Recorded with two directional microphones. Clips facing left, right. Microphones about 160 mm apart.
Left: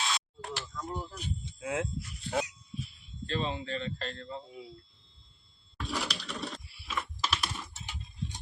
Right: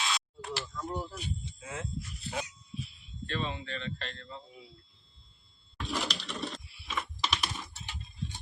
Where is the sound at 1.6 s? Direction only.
70° left (ahead or behind).